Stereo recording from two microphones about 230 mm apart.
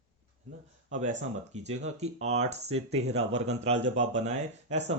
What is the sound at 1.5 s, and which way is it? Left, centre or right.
Speech, right.